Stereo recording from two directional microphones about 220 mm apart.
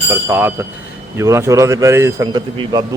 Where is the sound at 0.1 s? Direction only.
10° right (ahead or behind).